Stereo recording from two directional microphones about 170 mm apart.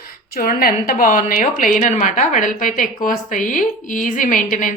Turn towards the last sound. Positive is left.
turn(degrees=50)  # may be behind; listen again after turning